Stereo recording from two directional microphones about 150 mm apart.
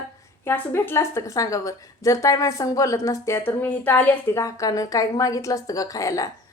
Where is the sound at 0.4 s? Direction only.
15° left (ahead or behind).